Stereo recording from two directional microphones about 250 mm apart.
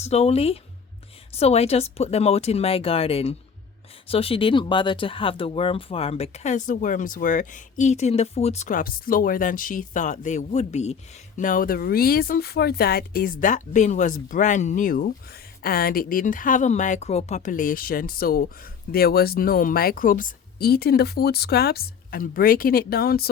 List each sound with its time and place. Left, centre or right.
0.0 s speech: left